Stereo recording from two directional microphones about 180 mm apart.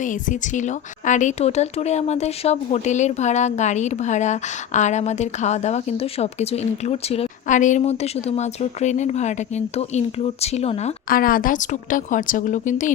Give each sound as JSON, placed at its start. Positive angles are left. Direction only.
{"t": 0.0, "sound": "a woman's voice", "side_deg": 45}
{"t": 11.1, "sound": "a woman's voice", "side_deg": 50}